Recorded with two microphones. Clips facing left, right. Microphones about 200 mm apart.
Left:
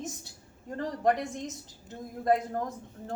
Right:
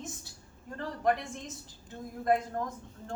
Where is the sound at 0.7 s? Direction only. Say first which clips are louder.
Left 2 dB; 35° left (ahead or behind).